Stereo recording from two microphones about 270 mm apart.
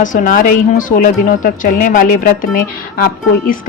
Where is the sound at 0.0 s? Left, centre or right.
Left.